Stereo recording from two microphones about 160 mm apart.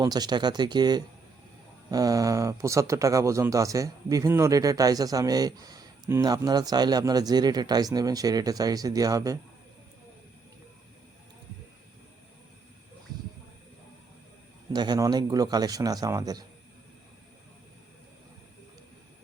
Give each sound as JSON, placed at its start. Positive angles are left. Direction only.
{"t": 0.0, "sound": "speech", "side_deg": -25}
{"t": 14.7, "sound": "speech", "side_deg": -25}